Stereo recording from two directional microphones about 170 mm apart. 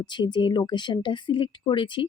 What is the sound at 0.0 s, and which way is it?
Speech, 25° left (ahead or behind).